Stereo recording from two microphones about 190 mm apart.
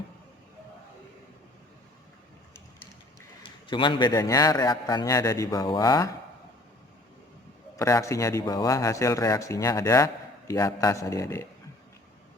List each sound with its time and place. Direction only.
3.7 s a man's voice: 25° left (ahead or behind)
7.8 s speech: 15° left (ahead or behind)